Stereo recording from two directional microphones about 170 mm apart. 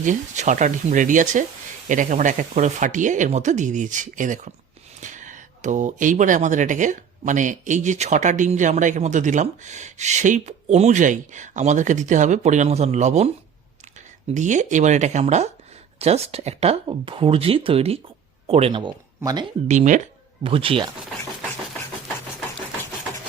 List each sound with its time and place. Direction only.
0.0 s speech: 45° right (ahead or behind); by 19.5 s 25° right (ahead or behind)
19.6 s speech: 45° right (ahead or behind)
20.4 s speech: 30° right (ahead or behind)